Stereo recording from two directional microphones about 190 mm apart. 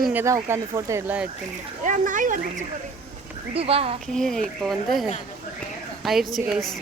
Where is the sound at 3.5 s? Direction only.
30° right (ahead or behind).